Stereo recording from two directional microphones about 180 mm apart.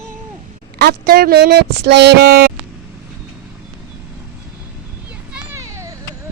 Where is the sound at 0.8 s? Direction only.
60° right (ahead or behind).